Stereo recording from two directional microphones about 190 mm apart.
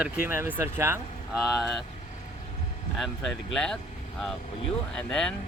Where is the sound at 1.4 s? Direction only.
5° right (ahead or behind).